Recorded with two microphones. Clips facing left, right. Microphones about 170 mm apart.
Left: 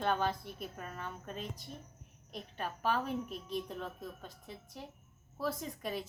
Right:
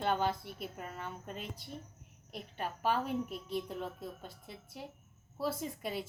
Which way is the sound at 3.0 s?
60° right (ahead or behind).